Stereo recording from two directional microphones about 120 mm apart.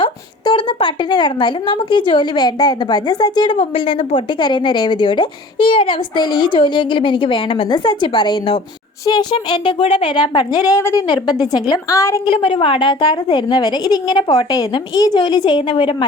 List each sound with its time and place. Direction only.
0.0 s a woman's voice: 45° left (ahead or behind); by 11.0 s 25° left (ahead or behind)
11.0 s a woman's voice: 35° left (ahead or behind)
12.3 s a woman's voice: 50° left (ahead or behind)